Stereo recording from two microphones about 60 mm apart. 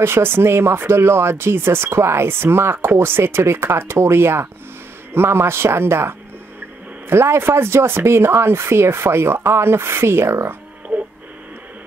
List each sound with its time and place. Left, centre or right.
0.0 s speech: right